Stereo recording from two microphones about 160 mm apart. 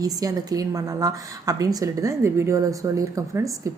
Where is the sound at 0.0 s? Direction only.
25° right (ahead or behind).